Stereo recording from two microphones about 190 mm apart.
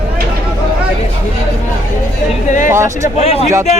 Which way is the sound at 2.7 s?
15° right (ahead or behind).